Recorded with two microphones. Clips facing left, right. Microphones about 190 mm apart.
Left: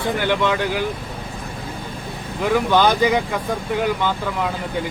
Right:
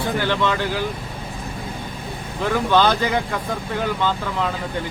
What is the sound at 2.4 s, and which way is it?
Speech, 10° left (ahead or behind).